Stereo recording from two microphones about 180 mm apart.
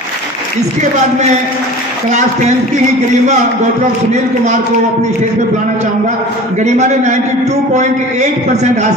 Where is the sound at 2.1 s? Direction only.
40° right (ahead or behind).